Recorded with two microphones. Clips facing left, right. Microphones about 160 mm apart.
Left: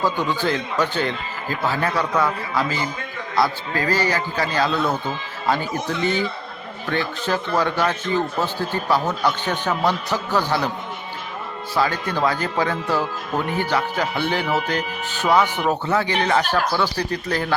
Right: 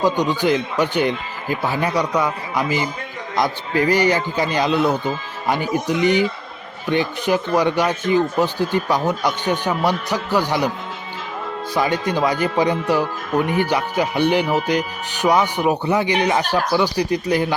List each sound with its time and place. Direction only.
0.0 s a man's voice: 15° right (ahead or behind)
11.7 s a man's voice: 15° right (ahead or behind)